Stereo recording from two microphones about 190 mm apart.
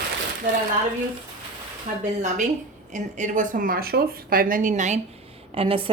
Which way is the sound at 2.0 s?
40° right (ahead or behind).